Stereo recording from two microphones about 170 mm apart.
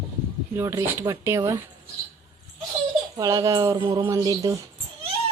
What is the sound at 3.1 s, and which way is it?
Speech, 20° right (ahead or behind).